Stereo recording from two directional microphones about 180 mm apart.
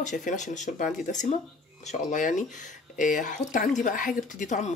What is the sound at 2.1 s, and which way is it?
Speech, 45° left (ahead or behind).